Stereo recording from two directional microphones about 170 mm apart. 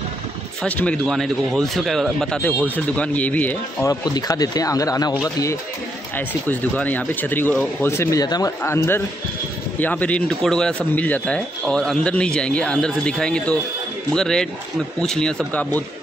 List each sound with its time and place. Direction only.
0.6 s a man's voice: 10° left (ahead or behind)
3.9 s a man's voice: 20° left (ahead or behind)